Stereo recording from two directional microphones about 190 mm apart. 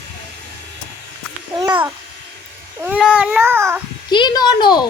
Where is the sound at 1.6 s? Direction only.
20° right (ahead or behind).